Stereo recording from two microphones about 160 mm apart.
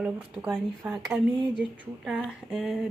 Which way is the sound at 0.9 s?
Centre (ahead or behind).